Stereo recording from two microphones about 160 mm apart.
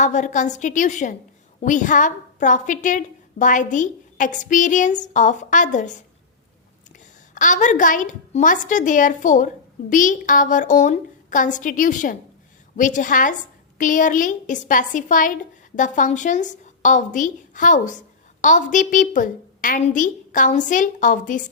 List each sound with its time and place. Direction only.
0.0 s a woman's voice: 50° left (ahead or behind)
7.3 s a woman's voice: 50° left (ahead or behind)